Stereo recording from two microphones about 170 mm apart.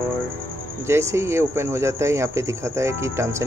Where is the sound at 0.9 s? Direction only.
15° right (ahead or behind).